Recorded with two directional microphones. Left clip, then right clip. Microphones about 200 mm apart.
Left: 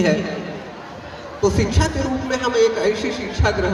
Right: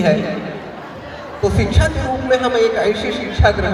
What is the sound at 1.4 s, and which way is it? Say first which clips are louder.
A man's voice: right 2 dB; 55° left (ahead or behind).